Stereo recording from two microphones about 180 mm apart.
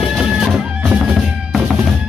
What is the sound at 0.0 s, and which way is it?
Music, centre (ahead or behind).